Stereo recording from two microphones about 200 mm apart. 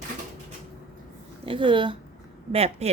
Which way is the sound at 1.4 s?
25° right (ahead or behind).